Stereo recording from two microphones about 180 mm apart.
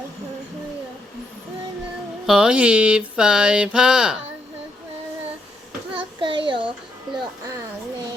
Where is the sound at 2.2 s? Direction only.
5° right (ahead or behind).